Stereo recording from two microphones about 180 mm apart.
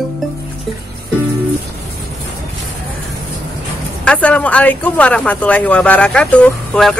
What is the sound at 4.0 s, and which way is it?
Speech, 5° left (ahead or behind).